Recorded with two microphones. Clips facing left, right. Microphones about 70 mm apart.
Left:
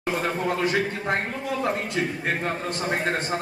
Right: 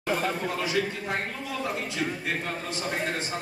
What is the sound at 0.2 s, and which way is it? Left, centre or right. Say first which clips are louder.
A man's voice: left 4 dB; left.